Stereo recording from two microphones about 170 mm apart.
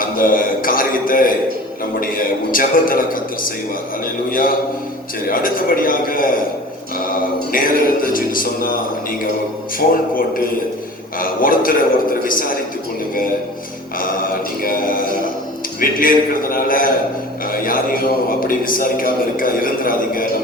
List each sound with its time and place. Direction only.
0.0 s a sound: 55° left (ahead or behind)
2.0 s a man's voice: 55° left (ahead or behind)
7.5 s a man's voice: 55° left (ahead or behind)
9.7 s a man's voice: 55° left (ahead or behind)
14.6 s a sound: 55° left (ahead or behind)
15.8 s a man's voice: 55° left (ahead or behind)